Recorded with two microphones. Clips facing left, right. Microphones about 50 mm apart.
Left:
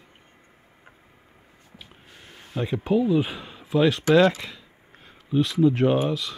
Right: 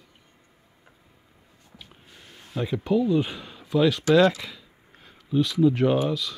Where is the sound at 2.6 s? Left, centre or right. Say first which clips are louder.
Left 1 dB; centre.